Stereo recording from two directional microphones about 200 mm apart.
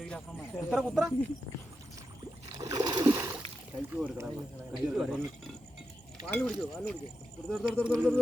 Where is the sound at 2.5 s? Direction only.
20° right (ahead or behind).